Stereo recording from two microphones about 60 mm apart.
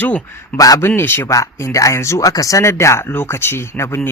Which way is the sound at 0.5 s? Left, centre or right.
Left.